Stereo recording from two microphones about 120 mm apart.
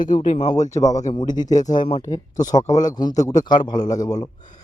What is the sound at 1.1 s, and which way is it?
A man's voice, 35° left (ahead or behind).